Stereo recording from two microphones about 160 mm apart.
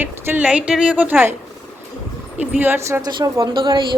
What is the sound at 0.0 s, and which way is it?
A woman's voice, 10° right (ahead or behind).